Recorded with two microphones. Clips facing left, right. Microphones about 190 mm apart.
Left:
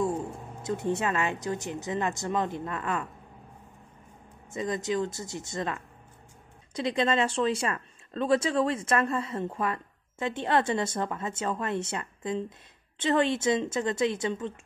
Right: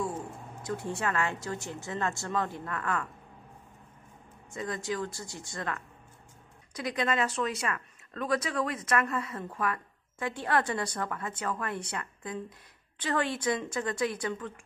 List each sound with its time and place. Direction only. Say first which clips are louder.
0.6 s speech: left 5 dB; 20° left (ahead or behind)
4.5 s speech: left 4 dB; 20° left (ahead or behind)